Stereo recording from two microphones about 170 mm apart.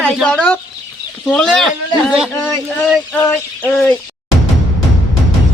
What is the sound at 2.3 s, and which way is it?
Bird, 10° left (ahead or behind).